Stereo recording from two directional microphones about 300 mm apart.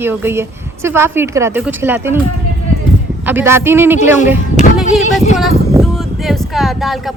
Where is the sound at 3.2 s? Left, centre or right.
Centre.